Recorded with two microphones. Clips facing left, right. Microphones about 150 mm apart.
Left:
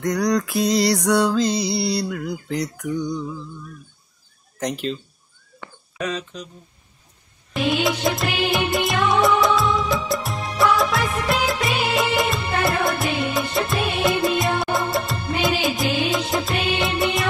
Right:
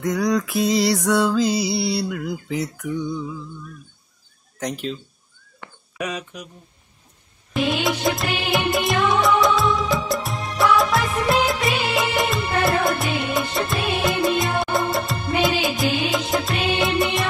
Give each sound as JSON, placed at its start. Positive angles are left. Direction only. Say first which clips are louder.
{"t": 0.0, "sound": "music", "louder": "even", "side_deg": -5}
{"t": 4.6, "sound": "music", "louder": "left 2 dB", "side_deg": 0}
{"t": 5.9, "sound": "speech", "louder": "left 1 dB", "side_deg": -10}
{"t": 7.5, "sound": "music", "louder": "even", "side_deg": 0}